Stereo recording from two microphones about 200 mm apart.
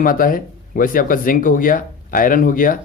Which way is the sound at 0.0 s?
45° left (ahead or behind).